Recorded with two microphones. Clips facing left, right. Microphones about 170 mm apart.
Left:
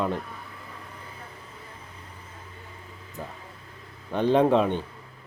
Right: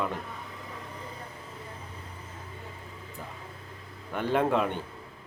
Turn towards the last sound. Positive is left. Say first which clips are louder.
# left 6 dB
turn(degrees=25)  # may be behind; listen again after turning